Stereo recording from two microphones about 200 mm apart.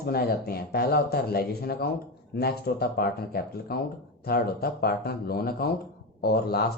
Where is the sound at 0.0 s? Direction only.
50° left (ahead or behind).